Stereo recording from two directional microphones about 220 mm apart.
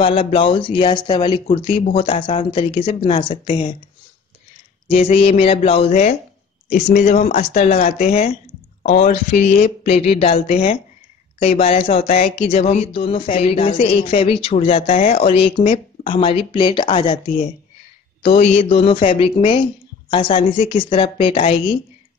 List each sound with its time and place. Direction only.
0.0 s speech: 25° left (ahead or behind)
4.8 s speech: 25° left (ahead or behind)